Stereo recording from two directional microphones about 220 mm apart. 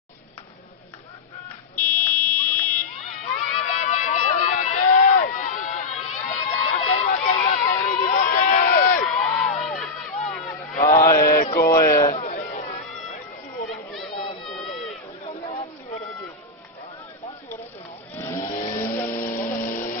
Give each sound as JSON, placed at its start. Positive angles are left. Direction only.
{"t": 1.8, "sound": "buzzer", "side_deg": 10}
{"t": 3.5, "sound": "crowd", "side_deg": 35}
{"t": 9.6, "sound": "crowd", "side_deg": 0}
{"t": 11.0, "sound": "mantra", "side_deg": 40}
{"t": 11.6, "sound": "a sound", "side_deg": 40}
{"t": 13.9, "sound": "chatter", "side_deg": 0}
{"t": 18.1, "sound": "vehicle", "side_deg": 10}
{"t": 18.8, "sound": "a sound", "side_deg": 10}
{"t": 19.1, "sound": "a sound", "side_deg": 40}